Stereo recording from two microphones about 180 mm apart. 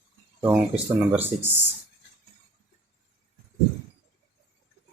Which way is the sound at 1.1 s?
10° right (ahead or behind).